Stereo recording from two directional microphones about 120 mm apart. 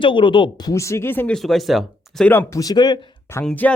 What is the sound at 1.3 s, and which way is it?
Speech, centre (ahead or behind).